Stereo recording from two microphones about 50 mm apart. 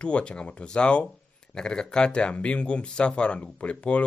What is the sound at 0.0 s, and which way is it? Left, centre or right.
Speech, left.